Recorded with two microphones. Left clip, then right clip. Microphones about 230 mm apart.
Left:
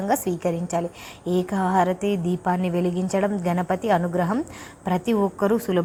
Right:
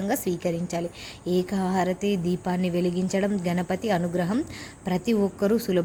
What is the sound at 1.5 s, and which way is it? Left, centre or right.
A woman's voice, centre.